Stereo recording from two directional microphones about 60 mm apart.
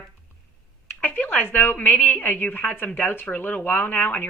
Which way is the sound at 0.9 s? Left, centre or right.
Left.